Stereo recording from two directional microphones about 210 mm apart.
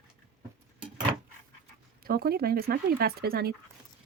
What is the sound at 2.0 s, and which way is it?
Speech, 45° right (ahead or behind).